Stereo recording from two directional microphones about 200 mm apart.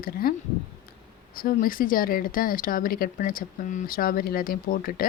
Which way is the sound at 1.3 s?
45° left (ahead or behind).